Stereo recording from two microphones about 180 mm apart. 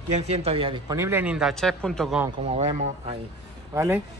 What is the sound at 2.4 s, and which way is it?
Speech, 40° right (ahead or behind).